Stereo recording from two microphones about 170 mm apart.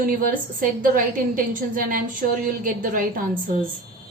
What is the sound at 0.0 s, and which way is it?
A woman's voice, 55° right (ahead or behind).